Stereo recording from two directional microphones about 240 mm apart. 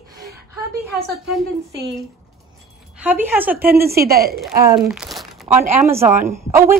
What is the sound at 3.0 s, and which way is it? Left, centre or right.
Speech, centre.